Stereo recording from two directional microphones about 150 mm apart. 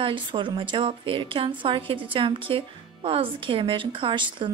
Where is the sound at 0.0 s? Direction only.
35° right (ahead or behind).